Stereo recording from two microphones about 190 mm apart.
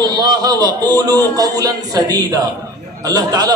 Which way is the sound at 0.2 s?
20° right (ahead or behind).